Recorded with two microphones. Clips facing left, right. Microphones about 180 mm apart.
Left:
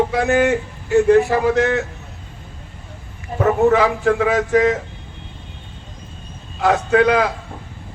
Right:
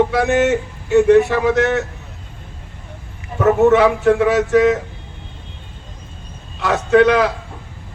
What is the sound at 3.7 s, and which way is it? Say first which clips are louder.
Speech: right 3 dB; 65° right (ahead or behind).